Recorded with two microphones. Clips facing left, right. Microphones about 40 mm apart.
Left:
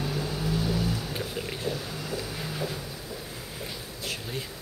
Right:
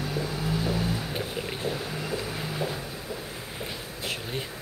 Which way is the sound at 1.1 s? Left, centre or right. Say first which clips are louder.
Right 1 dB; right.